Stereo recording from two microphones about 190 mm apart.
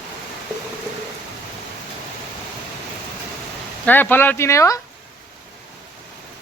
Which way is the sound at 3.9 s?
10° left (ahead or behind).